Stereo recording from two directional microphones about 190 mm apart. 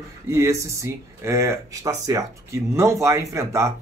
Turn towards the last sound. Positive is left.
turn(degrees=-15)  # may be behind; listen again after turning